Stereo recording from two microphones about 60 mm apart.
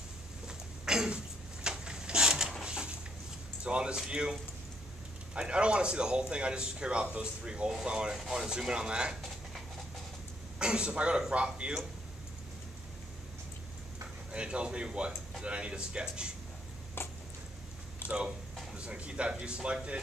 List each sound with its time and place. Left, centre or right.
0.5 s rub: centre
2.6 s a sound: centre
3.6 s speech: centre
10.6 s speech: centre
14.3 s speech: centre
18.0 s a sound: left
18.7 s speech: centre